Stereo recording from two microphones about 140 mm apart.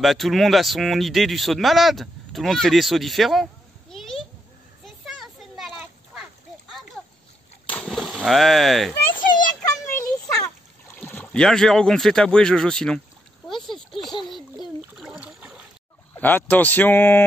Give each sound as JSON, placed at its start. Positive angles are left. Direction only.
{"t": 0.0, "sound": "speech", "side_deg": 0}
{"t": 3.9, "sound": "a sound", "side_deg": 0}
{"t": 4.8, "sound": "children playing", "side_deg": 0}
{"t": 6.7, "sound": "splash", "side_deg": 0}
{"t": 9.9, "sound": "splash", "side_deg": 20}
{"t": 11.0, "sound": "speech", "side_deg": 10}
{"t": 14.3, "sound": "splash", "side_deg": -5}
{"t": 16.2, "sound": "speech", "side_deg": 15}